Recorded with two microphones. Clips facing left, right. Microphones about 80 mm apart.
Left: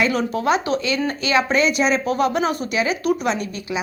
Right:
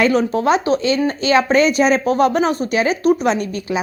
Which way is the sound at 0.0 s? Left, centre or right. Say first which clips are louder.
Right 5 dB; right.